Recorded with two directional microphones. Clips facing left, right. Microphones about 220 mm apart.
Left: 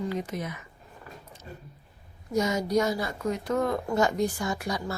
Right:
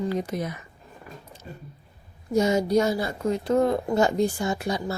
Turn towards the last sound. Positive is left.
turn(degrees=-25)  # may be behind; listen again after turning